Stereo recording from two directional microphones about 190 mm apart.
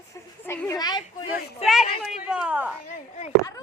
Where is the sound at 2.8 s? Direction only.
40° left (ahead or behind).